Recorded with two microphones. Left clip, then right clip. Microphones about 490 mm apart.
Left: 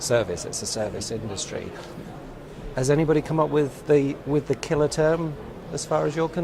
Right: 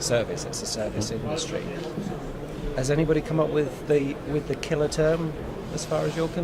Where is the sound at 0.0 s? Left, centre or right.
Left.